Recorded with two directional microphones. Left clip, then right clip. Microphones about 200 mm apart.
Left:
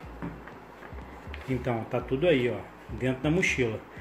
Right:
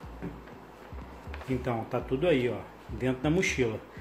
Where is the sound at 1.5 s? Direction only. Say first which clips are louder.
Left 1 dB; centre (ahead or behind).